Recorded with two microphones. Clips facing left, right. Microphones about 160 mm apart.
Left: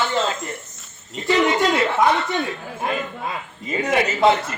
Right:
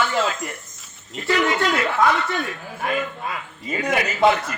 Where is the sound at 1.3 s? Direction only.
25° left (ahead or behind).